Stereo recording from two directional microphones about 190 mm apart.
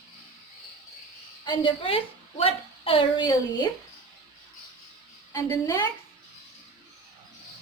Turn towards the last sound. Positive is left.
turn(degrees=20)  # may be behind; listen again after turning